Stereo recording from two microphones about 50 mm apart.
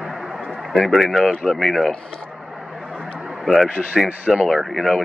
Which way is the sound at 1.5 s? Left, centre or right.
Centre.